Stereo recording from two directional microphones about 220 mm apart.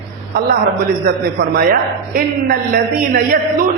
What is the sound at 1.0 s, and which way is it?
A man's voice, 45° right (ahead or behind).